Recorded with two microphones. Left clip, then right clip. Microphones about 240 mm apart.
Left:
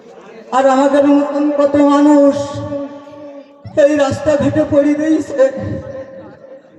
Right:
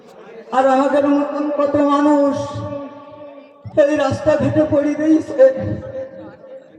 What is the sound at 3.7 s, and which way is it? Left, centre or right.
A man's voice, left.